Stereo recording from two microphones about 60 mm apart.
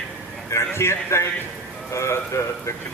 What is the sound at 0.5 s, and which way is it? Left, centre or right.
Speech, left.